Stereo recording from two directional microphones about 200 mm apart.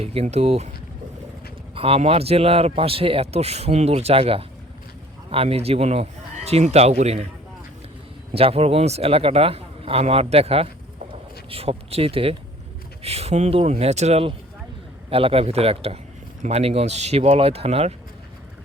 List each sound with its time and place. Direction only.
0.0 s speech: 30° right (ahead or behind)
1.7 s a man's voice: 30° right (ahead or behind)
8.3 s a man's voice: 30° right (ahead or behind)